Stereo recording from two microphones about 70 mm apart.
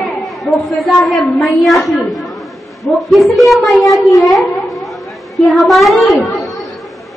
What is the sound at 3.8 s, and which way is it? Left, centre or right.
Speech, left.